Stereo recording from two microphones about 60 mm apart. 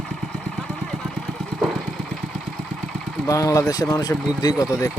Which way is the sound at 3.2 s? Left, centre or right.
Left.